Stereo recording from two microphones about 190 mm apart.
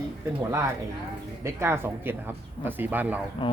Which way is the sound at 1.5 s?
10° right (ahead or behind).